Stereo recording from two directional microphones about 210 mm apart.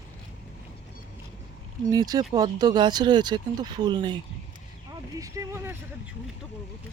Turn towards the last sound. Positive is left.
turn(degrees=-10)  # may be behind; listen again after turning